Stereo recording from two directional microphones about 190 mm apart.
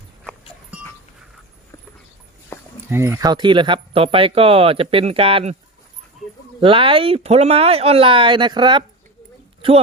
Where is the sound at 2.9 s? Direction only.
15° right (ahead or behind); by 5.5 s 30° right (ahead or behind).